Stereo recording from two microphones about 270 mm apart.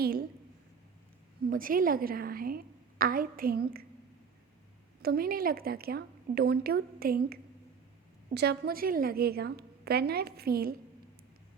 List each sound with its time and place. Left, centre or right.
0.0 s a woman's voice: right
1.5 s a woman's voice: right
5.0 s a woman's voice: right